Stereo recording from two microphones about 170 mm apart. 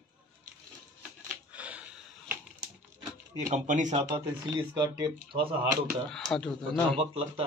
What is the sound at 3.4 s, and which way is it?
Speech, 45° right (ahead or behind).